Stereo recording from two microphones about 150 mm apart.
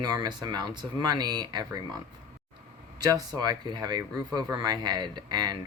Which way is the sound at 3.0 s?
25° right (ahead or behind).